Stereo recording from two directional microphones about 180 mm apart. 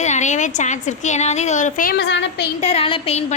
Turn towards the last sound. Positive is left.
turn(degrees=35)  # may be behind; listen again after turning